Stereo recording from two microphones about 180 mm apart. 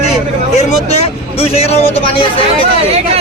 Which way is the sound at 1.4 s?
35° left (ahead or behind).